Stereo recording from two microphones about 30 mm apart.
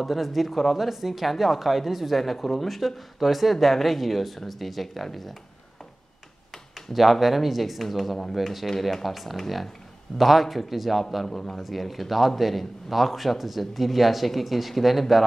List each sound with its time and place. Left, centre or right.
0.0 s a man's voice: centre
6.9 s a man's voice: centre
11.2 s a man's voice: centre
11.6 s a man's voice: centre